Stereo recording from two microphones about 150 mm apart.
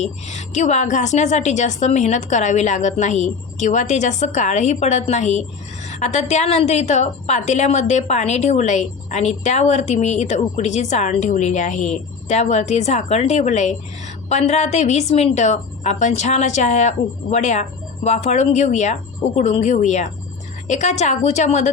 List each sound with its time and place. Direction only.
0.0 s a woman's voice: 50° left (ahead or behind)